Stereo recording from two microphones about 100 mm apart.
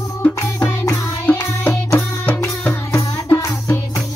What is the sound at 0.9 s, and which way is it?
Music, 20° left (ahead or behind).